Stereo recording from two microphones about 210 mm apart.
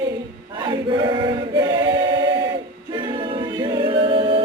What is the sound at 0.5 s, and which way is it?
Choir, 20° right (ahead or behind).